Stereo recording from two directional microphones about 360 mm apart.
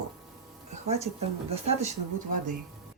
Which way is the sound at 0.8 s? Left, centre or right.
Centre.